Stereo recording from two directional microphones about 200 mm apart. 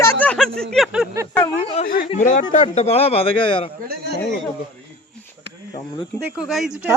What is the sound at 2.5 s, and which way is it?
Speech, 35° left (ahead or behind).